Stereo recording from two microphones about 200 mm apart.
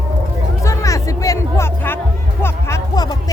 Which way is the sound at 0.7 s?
15° left (ahead or behind).